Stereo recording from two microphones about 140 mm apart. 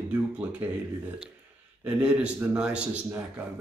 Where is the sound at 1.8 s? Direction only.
10° right (ahead or behind).